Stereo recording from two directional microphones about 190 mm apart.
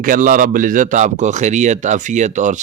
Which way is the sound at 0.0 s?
45° right (ahead or behind).